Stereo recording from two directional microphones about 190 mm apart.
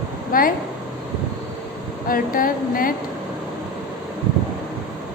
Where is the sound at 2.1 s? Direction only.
50° left (ahead or behind).